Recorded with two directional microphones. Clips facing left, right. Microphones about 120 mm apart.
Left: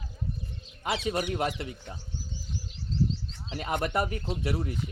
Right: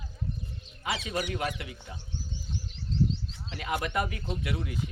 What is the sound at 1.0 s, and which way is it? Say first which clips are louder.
Speech: left 3 dB; 25° left (ahead or behind).